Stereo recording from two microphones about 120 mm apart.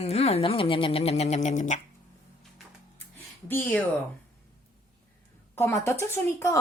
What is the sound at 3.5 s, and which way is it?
Speech, 15° left (ahead or behind).